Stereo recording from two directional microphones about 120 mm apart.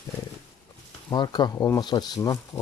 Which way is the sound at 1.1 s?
35° left (ahead or behind).